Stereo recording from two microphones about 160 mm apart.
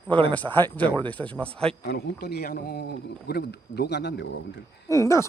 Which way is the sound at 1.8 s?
80° left.